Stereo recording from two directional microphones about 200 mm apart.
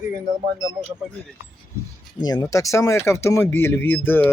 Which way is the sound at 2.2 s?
20° left (ahead or behind).